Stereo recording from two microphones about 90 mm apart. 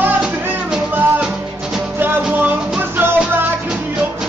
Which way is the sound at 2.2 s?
20° right (ahead or behind).